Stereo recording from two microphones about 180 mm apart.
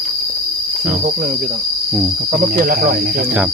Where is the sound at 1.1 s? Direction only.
50° right (ahead or behind).